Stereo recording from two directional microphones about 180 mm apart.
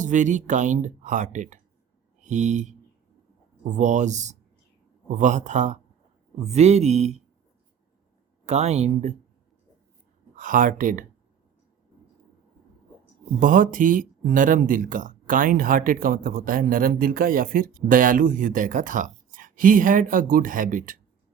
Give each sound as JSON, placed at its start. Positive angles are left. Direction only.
{"t": 0.0, "sound": "speech", "side_deg": -45}
{"t": 8.4, "sound": "speech", "side_deg": -40}
{"t": 10.3, "sound": "speech", "side_deg": -50}
{"t": 13.4, "sound": "speech", "side_deg": -50}